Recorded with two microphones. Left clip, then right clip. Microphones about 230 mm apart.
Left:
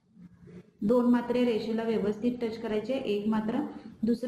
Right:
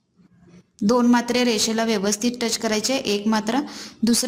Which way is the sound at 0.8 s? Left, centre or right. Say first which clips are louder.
Right 7 dB; right.